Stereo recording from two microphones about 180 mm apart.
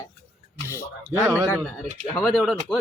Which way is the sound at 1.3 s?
10° right (ahead or behind).